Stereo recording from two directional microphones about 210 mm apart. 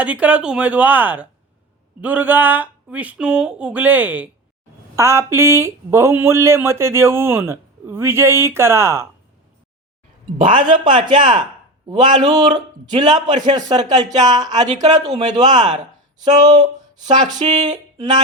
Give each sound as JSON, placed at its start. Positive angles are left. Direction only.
{"t": 0.0, "sound": "speech", "side_deg": -5}
{"t": 10.3, "sound": "speech", "side_deg": -40}
{"t": 10.6, "sound": "a man's voice", "side_deg": -25}
{"t": 17.7, "sound": "a sound", "side_deg": -20}